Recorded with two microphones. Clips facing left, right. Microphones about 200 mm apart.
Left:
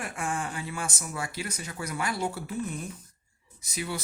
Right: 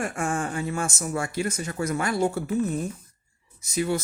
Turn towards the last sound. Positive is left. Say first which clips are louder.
# right 9 dB
turn(degrees=-45)  # may be behind; listen again after turning